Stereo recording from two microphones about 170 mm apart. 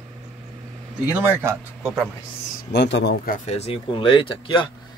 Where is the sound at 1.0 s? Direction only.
15° right (ahead or behind).